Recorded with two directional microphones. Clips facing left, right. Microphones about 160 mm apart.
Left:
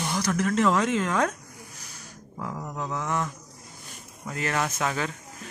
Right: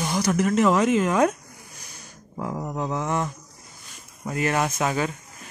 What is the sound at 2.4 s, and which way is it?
Speech, 25° right (ahead or behind).